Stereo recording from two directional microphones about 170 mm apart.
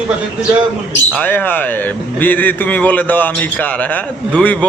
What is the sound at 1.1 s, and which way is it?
A man's voice, 10° left (ahead or behind).